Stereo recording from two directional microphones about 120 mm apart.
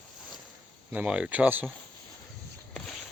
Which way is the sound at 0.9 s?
10° right (ahead or behind).